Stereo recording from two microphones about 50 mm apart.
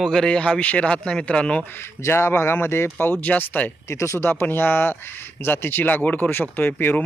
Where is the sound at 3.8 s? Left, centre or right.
Left.